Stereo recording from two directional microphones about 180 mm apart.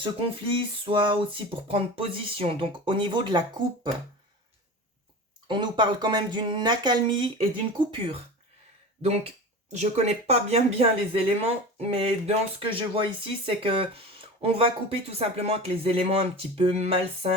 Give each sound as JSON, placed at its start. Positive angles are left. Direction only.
{"t": 0.0, "sound": "speech", "side_deg": -30}
{"t": 5.5, "sound": "speech", "side_deg": -25}